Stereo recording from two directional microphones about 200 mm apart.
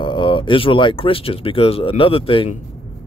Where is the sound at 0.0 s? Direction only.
25° left (ahead or behind).